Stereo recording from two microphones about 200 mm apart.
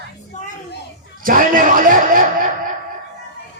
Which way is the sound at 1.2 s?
40° right (ahead or behind).